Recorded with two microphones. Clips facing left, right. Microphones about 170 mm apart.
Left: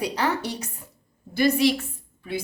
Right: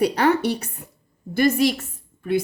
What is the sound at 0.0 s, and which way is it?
Speech, 60° right (ahead or behind).